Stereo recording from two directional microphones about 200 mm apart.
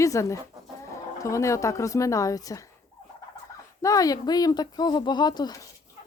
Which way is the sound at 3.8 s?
15° left (ahead or behind).